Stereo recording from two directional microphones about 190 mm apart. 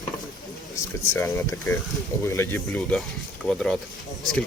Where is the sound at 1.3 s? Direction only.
15° left (ahead or behind).